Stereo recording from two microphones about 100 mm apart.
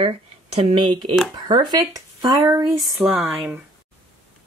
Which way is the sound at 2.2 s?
45° right (ahead or behind).